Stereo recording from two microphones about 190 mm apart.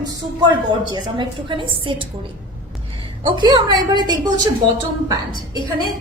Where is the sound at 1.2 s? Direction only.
25° right (ahead or behind).